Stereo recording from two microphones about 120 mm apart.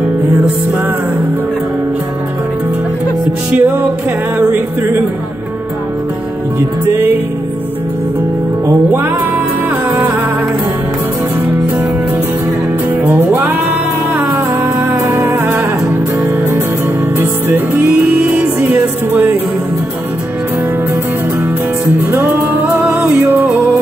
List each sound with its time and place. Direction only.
3.5 s music: 15° right (ahead or behind)
8.6 s music: 15° right (ahead or behind)
12.9 s music: 10° right (ahead or behind)
17.2 s music: 15° right (ahead or behind)
21.8 s music: 15° right (ahead or behind)